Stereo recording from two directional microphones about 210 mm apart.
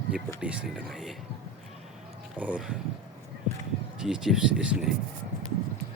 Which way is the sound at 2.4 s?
5° right (ahead or behind).